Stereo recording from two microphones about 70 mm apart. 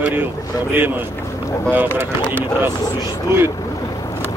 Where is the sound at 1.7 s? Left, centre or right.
Right.